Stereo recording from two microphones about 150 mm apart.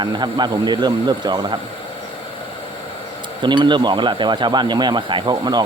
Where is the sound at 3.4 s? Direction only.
30° right (ahead or behind).